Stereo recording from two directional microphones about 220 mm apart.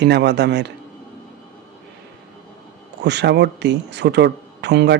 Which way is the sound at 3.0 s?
50° right (ahead or behind).